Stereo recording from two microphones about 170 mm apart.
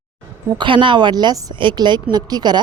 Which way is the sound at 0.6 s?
30° right (ahead or behind).